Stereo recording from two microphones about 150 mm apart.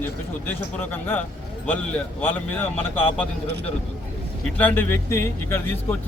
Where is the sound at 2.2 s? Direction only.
15° left (ahead or behind).